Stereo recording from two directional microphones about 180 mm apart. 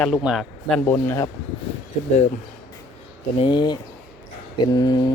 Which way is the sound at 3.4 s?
25° left (ahead or behind).